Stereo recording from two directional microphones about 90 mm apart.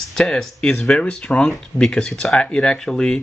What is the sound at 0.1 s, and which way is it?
Speech, 5° left (ahead or behind).